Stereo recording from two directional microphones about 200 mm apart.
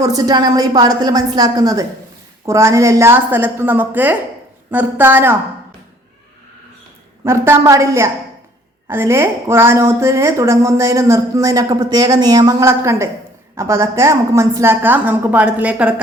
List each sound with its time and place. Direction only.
0.0 s a woman's voice: 20° right (ahead or behind)
7.3 s a woman's voice: 15° right (ahead or behind)